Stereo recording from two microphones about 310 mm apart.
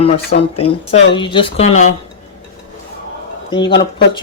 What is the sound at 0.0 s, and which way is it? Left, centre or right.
Speech, centre.